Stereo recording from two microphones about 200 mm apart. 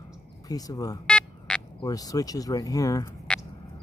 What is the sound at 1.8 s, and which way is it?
Speech, 20° left (ahead or behind).